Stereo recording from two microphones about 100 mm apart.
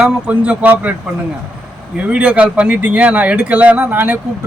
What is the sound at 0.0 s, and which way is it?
Speech, 15° right (ahead or behind).